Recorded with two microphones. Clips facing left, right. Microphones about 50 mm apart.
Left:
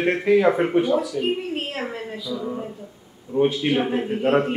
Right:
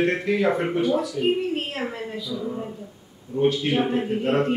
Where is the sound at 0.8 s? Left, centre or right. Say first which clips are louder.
Even; centre.